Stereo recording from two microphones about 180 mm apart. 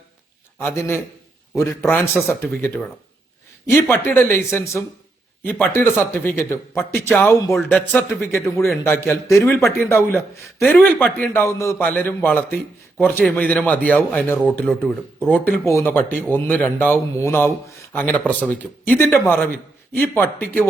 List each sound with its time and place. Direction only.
0.6 s speech: 15° left (ahead or behind)
7.5 s speech: 5° left (ahead or behind)